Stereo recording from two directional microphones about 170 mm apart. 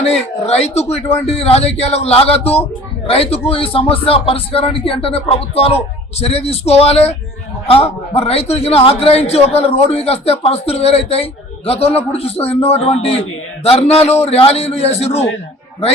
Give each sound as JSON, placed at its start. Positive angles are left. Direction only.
{"t": 0.0, "sound": "a man's voice", "side_deg": 40}